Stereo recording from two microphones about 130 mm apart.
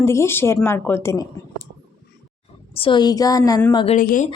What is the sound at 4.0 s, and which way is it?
Speech, 90° left.